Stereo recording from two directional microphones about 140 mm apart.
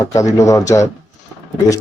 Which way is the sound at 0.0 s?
25° left (ahead or behind).